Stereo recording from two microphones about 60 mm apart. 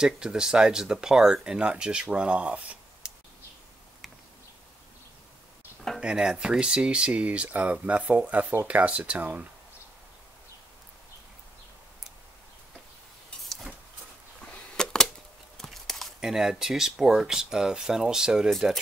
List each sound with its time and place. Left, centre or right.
0.0 s speech: centre
5.9 s speech: centre
13.4 s vehicle: centre
14.4 s a sound: centre
15.5 s tearing: centre
16.2 s speech: centre
18.5 s speech: centre